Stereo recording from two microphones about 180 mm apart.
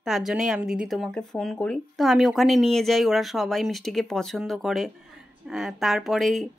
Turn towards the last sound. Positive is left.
turn(degrees=0)  # may be behind; listen again after turning